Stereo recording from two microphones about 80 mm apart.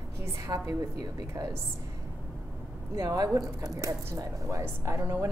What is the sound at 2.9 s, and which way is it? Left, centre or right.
A woman's voice, right.